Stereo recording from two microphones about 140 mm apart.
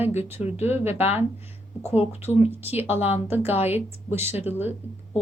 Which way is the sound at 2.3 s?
45° left (ahead or behind).